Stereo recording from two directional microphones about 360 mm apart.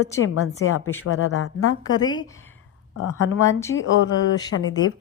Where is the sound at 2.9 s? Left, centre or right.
Left.